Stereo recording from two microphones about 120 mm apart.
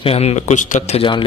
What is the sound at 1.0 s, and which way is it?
Speech, 40° left (ahead or behind).